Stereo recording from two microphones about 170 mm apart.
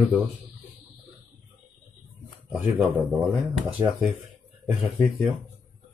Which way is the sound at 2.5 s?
10° right (ahead or behind).